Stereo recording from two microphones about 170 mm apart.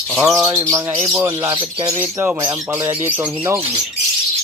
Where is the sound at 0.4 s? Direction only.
15° right (ahead or behind).